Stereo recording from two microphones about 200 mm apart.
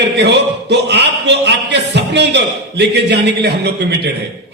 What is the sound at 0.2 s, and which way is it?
A man's voice, 60° right (ahead or behind).